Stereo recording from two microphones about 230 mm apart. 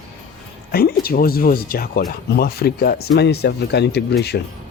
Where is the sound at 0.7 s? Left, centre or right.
Left.